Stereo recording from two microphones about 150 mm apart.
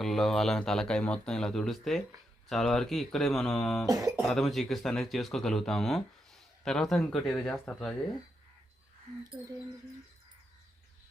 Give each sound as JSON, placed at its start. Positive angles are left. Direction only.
{"t": 0.0, "sound": "speech", "side_deg": 0}
{"t": 3.8, "sound": "speech", "side_deg": -25}
{"t": 4.2, "sound": "speech", "side_deg": 0}